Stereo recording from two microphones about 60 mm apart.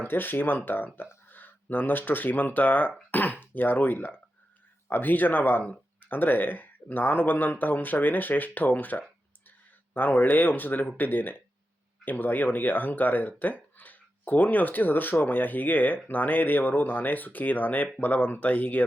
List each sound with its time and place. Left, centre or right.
0.1 s speech: left